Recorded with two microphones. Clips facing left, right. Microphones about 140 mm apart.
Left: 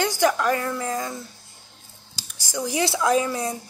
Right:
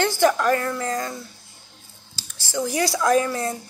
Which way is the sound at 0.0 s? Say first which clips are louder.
Right 2 dB; 15° left (ahead or behind).